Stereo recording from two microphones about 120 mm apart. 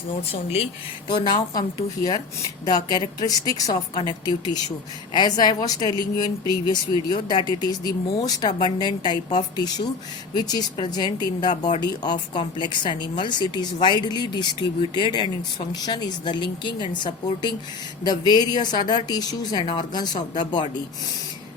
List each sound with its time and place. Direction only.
0.3 s speech: 60° left (ahead or behind)
1.0 s speech: 35° left (ahead or behind)